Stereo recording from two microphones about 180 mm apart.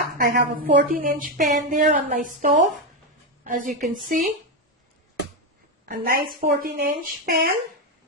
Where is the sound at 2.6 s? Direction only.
Centre (ahead or behind).